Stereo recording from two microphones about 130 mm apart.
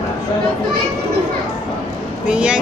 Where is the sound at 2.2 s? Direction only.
5° right (ahead or behind).